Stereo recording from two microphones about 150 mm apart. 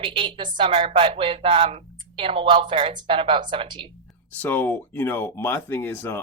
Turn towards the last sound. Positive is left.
turn(degrees=15)  # may be behind; listen again after turning